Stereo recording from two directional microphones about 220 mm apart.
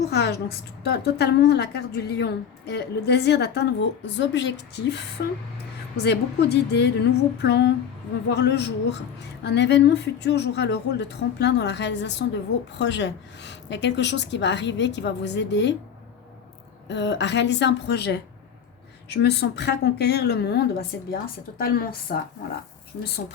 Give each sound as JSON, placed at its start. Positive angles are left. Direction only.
{"t": 0.1, "sound": "a woman's voice", "side_deg": 50}
{"t": 16.9, "sound": "a woman's voice", "side_deg": 55}